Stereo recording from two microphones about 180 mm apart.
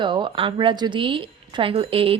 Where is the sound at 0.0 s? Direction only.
25° right (ahead or behind).